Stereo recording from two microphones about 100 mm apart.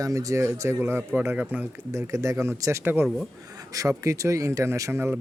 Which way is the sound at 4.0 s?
30° right (ahead or behind).